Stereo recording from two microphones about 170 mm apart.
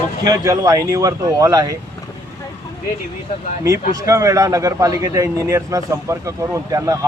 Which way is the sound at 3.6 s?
15° right (ahead or behind).